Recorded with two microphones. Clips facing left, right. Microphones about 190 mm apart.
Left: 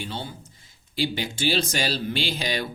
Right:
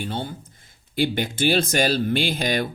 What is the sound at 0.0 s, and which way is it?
Speech, 50° right (ahead or behind).